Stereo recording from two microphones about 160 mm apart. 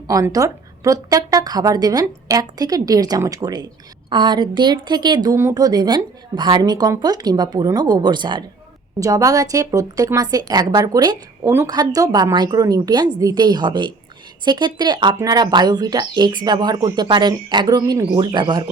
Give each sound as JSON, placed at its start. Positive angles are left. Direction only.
{"t": 0.1, "sound": "a woman's voice", "side_deg": -20}